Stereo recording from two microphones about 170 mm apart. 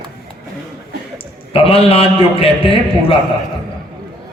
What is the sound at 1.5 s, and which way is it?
A man's voice, 35° left (ahead or behind).